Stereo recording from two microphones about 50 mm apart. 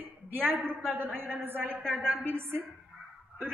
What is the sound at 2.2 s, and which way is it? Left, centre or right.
Speech, right.